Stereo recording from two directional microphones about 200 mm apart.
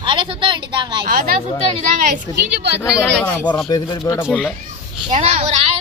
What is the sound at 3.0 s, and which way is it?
Speech, 5° left (ahead or behind).